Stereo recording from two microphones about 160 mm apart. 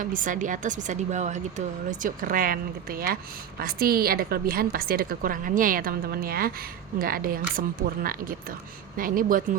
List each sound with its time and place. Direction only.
0.0 s a woman's voice: 55° right (ahead or behind)